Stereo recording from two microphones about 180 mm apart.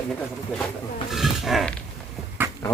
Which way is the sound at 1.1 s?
Centre (ahead or behind).